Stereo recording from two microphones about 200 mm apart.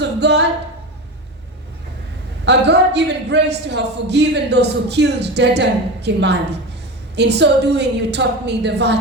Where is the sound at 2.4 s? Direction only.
60° right (ahead or behind).